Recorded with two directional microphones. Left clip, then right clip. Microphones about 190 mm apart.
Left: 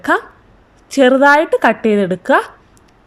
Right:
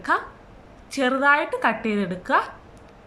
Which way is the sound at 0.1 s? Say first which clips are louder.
Left 4 dB; 35° left (ahead or behind).